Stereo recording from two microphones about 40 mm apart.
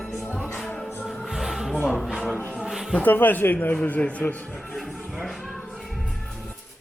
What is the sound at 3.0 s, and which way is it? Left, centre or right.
A man's voice, left.